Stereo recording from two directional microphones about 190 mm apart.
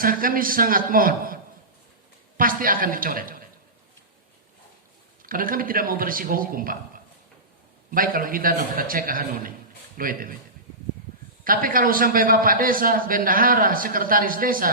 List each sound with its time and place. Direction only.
0.0 s a man's voice: 50° right (ahead or behind)
2.4 s a man's voice: 45° right (ahead or behind)
5.2 s a man's voice: 50° right (ahead or behind)
11.4 s a man's voice: 50° right (ahead or behind)